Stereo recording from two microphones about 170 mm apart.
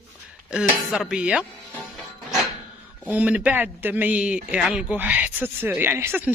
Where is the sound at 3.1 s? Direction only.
10° right (ahead or behind).